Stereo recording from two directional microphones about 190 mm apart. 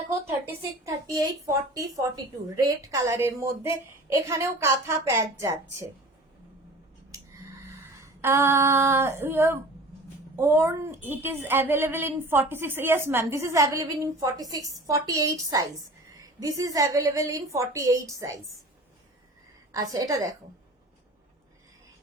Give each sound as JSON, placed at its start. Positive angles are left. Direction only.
{"t": 0.4, "sound": "a woman's voice", "side_deg": -15}
{"t": 8.2, "sound": "a woman's voice", "side_deg": -15}
{"t": 19.7, "sound": "a woman's voice", "side_deg": -20}